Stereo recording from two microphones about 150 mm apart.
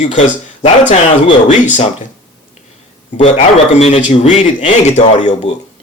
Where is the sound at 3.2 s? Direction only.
45° left (ahead or behind).